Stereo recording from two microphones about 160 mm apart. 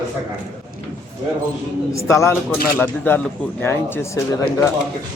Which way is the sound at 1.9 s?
20° left (ahead or behind).